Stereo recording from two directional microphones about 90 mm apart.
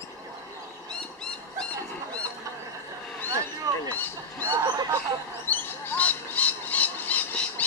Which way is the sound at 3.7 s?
45° right (ahead or behind).